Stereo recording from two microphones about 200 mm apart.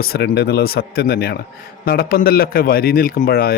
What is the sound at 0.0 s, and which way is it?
A man's voice, 55° left (ahead or behind).